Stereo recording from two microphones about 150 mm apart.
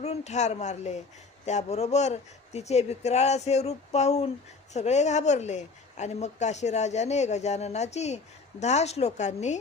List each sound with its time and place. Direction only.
0.0 s speech: 50° left (ahead or behind)